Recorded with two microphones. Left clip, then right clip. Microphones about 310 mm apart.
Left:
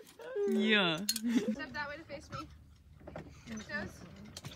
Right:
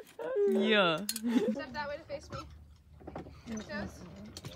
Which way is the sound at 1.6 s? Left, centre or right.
Centre.